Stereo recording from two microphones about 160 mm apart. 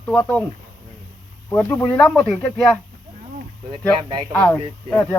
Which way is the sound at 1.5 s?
10° left (ahead or behind).